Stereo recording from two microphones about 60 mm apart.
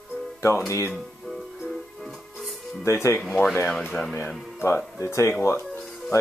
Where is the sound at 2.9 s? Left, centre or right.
Left.